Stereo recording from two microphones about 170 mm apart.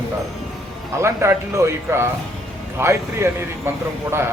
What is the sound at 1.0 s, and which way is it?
Speech, 15° right (ahead or behind).